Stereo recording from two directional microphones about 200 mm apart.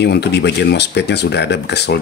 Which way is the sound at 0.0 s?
55° left (ahead or behind).